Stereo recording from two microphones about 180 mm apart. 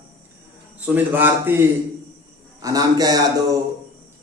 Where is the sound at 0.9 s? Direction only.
10° right (ahead or behind).